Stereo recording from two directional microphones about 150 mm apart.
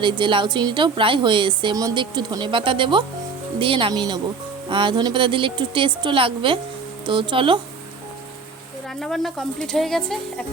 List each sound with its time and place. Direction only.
0.0 s a woman's voice: 35° right (ahead or behind)
9.0 s speech: centre (ahead or behind)